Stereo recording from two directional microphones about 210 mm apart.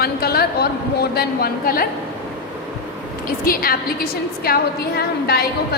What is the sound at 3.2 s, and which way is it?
A woman's voice, 45° left (ahead or behind).